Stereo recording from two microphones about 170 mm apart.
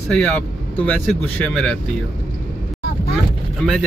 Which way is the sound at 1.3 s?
5° left (ahead or behind).